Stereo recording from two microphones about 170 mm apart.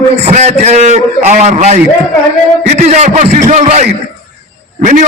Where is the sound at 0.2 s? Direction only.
40° right (ahead or behind).